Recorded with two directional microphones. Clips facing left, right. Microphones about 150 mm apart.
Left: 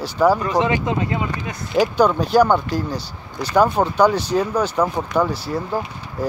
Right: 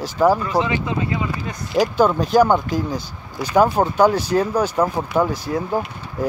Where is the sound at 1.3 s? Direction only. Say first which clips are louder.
Left 1 dB; centre (ahead or behind).